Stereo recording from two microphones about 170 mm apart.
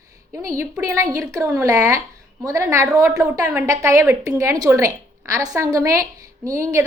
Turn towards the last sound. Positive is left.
turn(degrees=-15)  # may be behind; listen again after turning